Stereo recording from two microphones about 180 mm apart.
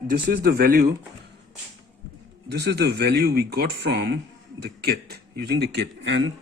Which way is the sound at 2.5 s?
70° right (ahead or behind).